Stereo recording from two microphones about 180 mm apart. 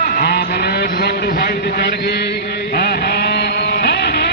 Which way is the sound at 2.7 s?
65° left (ahead or behind).